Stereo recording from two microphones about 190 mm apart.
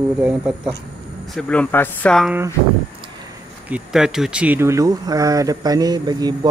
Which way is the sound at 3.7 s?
5° right (ahead or behind).